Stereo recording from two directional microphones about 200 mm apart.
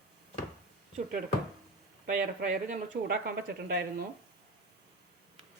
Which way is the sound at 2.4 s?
40° right (ahead or behind).